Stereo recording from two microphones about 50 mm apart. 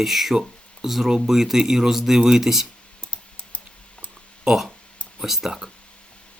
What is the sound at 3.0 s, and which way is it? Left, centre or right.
Typing, left.